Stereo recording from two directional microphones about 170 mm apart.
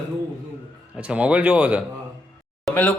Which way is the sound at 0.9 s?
5° right (ahead or behind).